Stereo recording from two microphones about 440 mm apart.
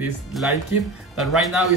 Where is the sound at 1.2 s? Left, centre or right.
Centre.